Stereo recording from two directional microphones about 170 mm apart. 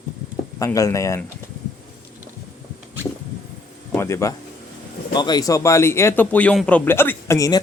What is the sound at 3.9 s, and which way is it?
A man's voice, 15° left (ahead or behind).